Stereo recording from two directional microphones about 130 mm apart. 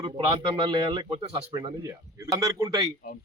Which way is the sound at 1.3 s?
30° right (ahead or behind).